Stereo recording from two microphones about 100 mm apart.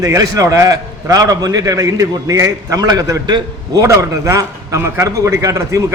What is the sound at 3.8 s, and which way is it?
A man's voice, 30° right (ahead or behind).